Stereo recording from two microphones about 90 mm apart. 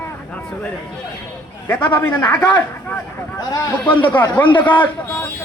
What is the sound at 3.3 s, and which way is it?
Speech, 45° left (ahead or behind).